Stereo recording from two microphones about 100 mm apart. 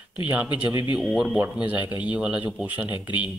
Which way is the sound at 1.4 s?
15° right (ahead or behind).